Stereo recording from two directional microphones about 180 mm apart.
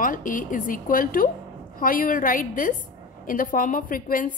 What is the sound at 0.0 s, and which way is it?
A woman's voice, 50° left (ahead or behind).